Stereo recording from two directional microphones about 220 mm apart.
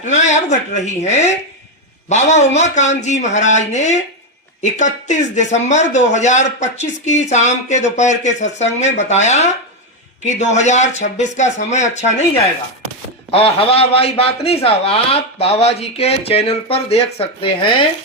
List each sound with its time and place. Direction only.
0.0 s speech: 30° left (ahead or behind)
13.3 s speech: 25° left (ahead or behind)